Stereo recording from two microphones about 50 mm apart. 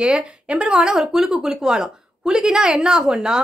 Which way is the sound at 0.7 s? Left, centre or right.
Centre.